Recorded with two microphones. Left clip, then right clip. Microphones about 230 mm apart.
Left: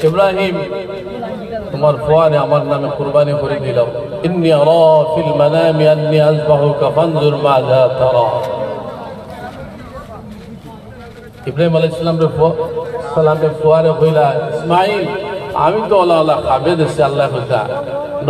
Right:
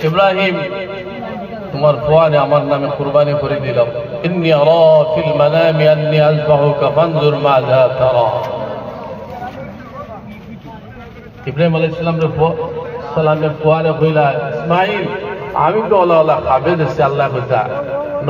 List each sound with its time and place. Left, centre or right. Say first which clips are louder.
0.1 s a man's voice: right 1 dB; left
11.4 s a man's voice: left 2 dB; left